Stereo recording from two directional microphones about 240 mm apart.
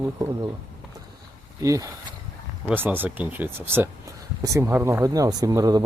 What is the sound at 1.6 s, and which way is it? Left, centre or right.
Speech, centre.